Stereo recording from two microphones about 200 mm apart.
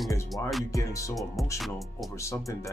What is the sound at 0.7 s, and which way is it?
Speech, 15° left (ahead or behind).